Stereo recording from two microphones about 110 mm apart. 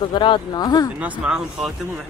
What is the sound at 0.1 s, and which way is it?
Speech, 45° left (ahead or behind).